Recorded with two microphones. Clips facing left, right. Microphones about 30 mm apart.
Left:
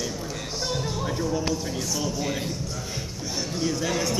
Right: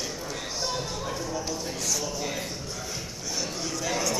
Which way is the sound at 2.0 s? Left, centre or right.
Centre.